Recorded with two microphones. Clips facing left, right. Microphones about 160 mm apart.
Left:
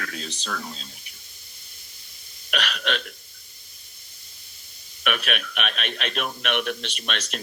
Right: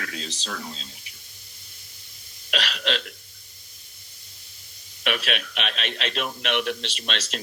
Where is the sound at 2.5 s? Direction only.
30° right (ahead or behind).